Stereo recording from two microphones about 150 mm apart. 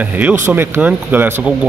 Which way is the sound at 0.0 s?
10° right (ahead or behind).